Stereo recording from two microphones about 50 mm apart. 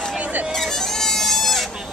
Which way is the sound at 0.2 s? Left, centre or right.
Right.